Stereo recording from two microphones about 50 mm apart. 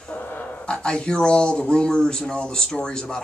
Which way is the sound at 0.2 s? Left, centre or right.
Left.